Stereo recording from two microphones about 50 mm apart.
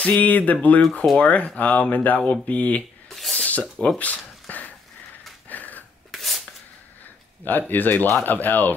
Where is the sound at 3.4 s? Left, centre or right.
Left.